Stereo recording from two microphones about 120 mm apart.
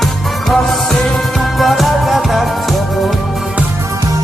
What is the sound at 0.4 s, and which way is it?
Music, centre (ahead or behind).